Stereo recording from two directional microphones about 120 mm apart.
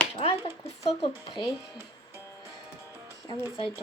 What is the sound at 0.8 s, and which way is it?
Speech, 50° left (ahead or behind).